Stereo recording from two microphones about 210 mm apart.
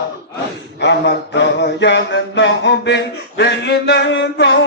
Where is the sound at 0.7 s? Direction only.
55° left (ahead or behind).